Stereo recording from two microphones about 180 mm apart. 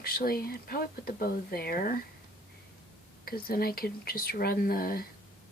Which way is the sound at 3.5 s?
55° left (ahead or behind).